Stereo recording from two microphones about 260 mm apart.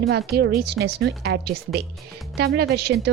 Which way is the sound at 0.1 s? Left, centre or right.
Right.